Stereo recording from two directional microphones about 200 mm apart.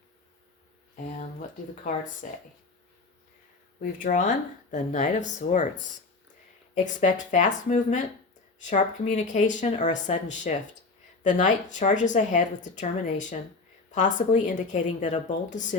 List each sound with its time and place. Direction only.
2.2 s speech: 40° left (ahead or behind)
3.9 s speech: 40° left (ahead or behind)
6.8 s speech: 40° left (ahead or behind)